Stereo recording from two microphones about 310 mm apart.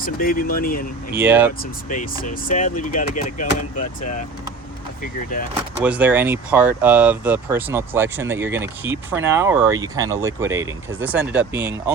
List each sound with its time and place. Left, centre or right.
0.0 s speech: left
1.1 s speech: centre
1.9 s speech: left
5.5 s speech: centre